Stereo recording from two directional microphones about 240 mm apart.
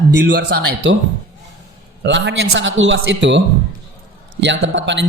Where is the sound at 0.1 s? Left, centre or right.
Right.